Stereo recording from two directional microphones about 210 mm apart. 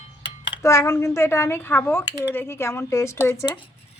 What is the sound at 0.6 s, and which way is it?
Speech, 15° left (ahead or behind).